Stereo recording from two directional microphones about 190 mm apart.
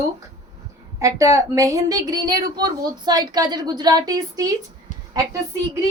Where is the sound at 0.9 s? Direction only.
15° right (ahead or behind).